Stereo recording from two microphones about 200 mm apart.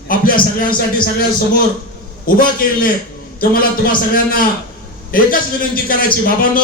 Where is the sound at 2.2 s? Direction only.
45° left (ahead or behind).